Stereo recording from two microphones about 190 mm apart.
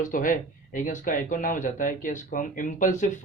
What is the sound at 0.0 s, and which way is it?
Speech, 45° left (ahead or behind).